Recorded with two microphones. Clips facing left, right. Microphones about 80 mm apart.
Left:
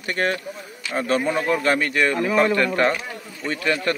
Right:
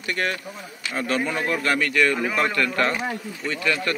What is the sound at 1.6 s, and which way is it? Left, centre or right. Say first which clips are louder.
Speech: left 1 dB; left.